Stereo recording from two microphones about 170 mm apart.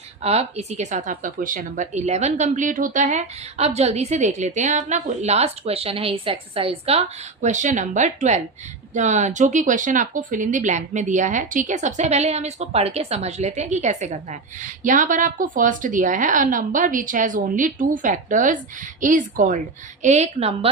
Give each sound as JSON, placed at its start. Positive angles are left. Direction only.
{"t": 0.2, "sound": "speech", "side_deg": -40}
{"t": 7.4, "sound": "a woman's voice", "side_deg": -45}